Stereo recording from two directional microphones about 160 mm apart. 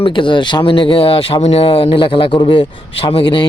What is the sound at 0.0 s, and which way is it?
A woman's voice, 30° left (ahead or behind).